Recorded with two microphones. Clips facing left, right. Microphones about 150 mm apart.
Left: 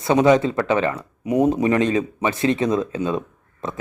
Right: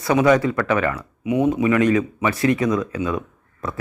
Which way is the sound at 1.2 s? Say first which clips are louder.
Left 1 dB; 40° left (ahead or behind).